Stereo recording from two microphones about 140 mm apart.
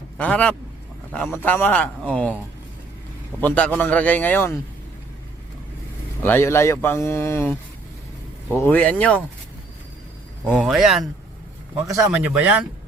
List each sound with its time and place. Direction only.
0.2 s a man's voice: 10° left (ahead or behind)
3.4 s a man's voice: 10° left (ahead or behind)
6.2 s speech: 15° left (ahead or behind)
8.5 s a man's voice: 15° left (ahead or behind)
10.6 s speech: 5° right (ahead or behind)
11.7 s a man's voice: 25° right (ahead or behind)
12.1 s speech: 10° right (ahead or behind)